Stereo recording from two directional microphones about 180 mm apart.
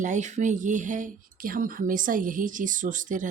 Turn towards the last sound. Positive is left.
turn(degrees=-45)  # may be behind; listen again after turning